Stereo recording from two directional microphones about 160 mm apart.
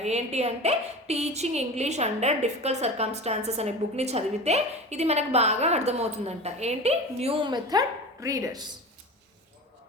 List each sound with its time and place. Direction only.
0.0 s a woman's voice: 45° right (ahead or behind); by 8.7 s 25° right (ahead or behind)